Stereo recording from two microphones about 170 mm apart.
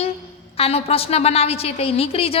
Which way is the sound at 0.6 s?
35° left (ahead or behind).